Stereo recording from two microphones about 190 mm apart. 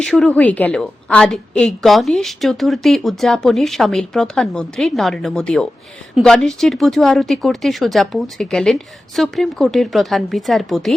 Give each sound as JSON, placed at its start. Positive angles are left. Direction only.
{"t": 0.0, "sound": "a woman's voice", "side_deg": 5}